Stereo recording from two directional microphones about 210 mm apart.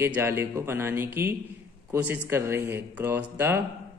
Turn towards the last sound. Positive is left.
turn(degrees=-10)  # may be behind; listen again after turning